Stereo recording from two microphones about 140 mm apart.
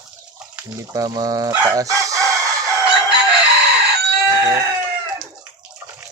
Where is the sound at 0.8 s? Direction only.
25° right (ahead or behind).